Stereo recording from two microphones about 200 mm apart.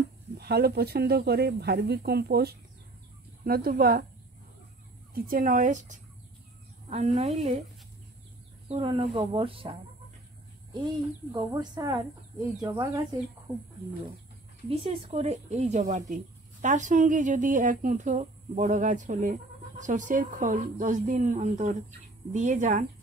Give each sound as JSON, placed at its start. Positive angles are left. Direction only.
{"t": 0.4, "sound": "speech", "side_deg": -55}
{"t": 5.1, "sound": "speech", "side_deg": -45}
{"t": 8.6, "sound": "speech", "side_deg": -30}
{"t": 10.8, "sound": "speech", "side_deg": -20}
{"t": 14.7, "sound": "speech", "side_deg": -30}